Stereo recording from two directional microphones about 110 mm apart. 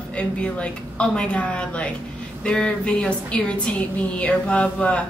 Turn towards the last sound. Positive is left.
turn(degrees=10)  # may be behind; listen again after turning